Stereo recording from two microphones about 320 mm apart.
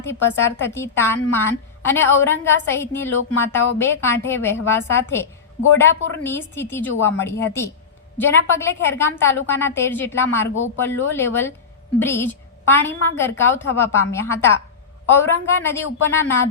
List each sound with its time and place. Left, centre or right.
0.0 s a woman's voice: centre